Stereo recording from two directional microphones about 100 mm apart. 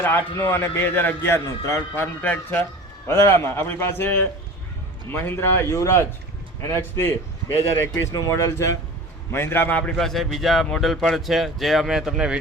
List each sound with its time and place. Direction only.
0.0 s a man's voice: 20° left (ahead or behind)
10.0 s speech: centre (ahead or behind)